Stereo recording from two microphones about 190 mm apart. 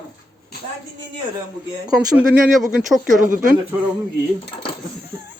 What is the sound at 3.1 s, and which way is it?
Speech, 45° right (ahead or behind).